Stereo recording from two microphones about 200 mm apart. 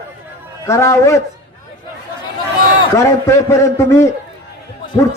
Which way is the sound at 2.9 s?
15° left (ahead or behind).